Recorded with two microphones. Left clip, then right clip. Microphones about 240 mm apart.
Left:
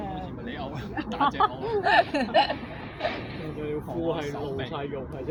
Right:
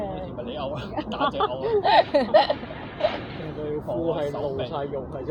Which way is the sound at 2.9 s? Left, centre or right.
Centre.